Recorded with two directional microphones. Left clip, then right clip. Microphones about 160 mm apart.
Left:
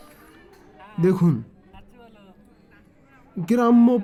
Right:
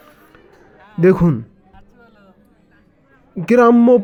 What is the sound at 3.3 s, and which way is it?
Speech, 20° right (ahead or behind).